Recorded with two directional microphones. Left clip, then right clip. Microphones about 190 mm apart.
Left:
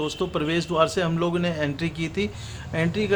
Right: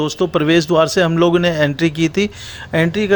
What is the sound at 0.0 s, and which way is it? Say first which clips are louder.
Speech: right 9 dB; 35° right (ahead or behind).